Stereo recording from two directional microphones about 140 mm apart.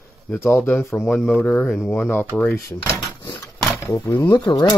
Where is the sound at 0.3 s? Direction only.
20° left (ahead or behind).